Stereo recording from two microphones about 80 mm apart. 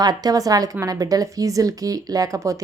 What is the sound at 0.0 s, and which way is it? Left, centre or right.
A woman's voice, right.